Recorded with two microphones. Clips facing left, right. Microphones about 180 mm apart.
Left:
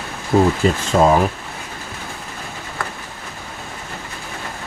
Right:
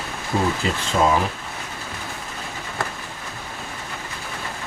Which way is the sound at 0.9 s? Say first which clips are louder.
Left 4 dB; 50° left (ahead or behind).